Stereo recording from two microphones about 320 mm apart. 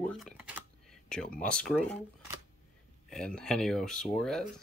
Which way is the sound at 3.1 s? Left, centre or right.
Centre.